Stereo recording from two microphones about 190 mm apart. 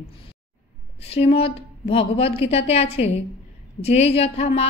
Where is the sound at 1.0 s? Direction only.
30° left (ahead or behind).